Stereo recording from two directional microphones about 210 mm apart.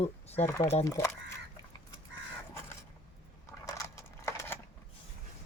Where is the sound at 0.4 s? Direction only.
10° left (ahead or behind).